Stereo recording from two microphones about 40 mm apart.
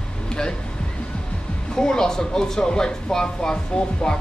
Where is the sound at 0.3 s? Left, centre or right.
Left.